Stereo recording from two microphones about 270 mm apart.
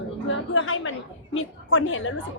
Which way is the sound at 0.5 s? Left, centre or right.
Left.